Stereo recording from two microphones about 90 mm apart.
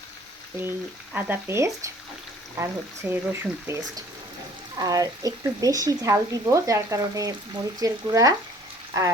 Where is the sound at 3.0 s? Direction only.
20° right (ahead or behind).